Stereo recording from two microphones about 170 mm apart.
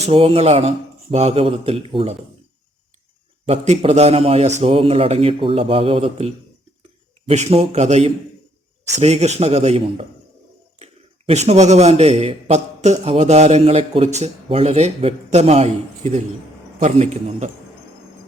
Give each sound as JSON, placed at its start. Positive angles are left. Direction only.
{"t": 0.0, "sound": "a man's voice", "side_deg": -35}
{"t": 3.4, "sound": "a man's voice", "side_deg": -40}
{"t": 11.3, "sound": "a man's voice", "side_deg": -40}